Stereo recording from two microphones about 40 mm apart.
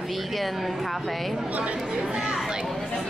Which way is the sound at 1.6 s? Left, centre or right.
Right.